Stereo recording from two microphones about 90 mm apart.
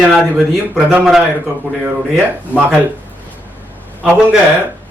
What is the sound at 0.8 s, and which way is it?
Speech, 15° right (ahead or behind).